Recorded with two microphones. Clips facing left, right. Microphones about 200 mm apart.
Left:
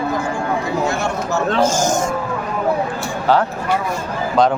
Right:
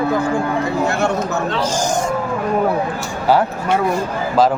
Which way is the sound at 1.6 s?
45° left (ahead or behind).